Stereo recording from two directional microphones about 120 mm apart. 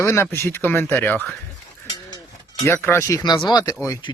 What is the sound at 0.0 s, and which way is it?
Speech, 20° left (ahead or behind).